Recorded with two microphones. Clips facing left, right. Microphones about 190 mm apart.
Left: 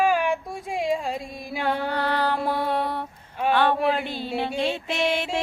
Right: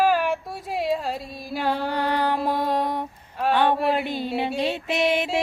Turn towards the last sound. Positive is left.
turn(degrees=-10)  # may be behind; listen again after turning